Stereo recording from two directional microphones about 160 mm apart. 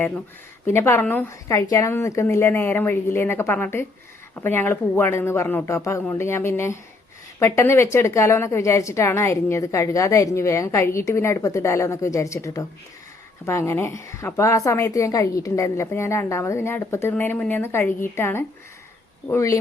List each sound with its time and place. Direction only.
0.6 s a woman's voice: 15° left (ahead or behind)